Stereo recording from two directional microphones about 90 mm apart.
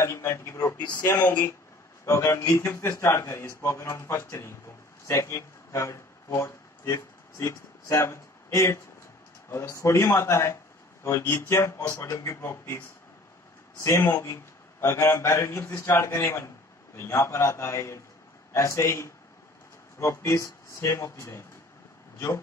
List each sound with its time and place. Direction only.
0.0 s a man's voice: 30° left (ahead or behind)
0.7 s speech: 50° left (ahead or behind)
1.0 s a man's voice: 20° left (ahead or behind)
13.8 s a man's voice: 30° left (ahead or behind)